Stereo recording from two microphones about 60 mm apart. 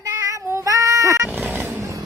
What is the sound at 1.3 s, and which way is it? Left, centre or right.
Roaring cats, right.